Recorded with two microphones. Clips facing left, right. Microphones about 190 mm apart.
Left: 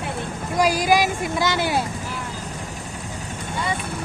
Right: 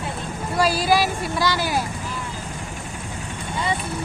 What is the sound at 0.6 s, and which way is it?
Speech, 15° left (ahead or behind).